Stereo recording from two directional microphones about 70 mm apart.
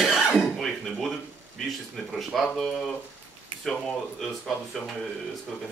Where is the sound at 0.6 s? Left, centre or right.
Centre.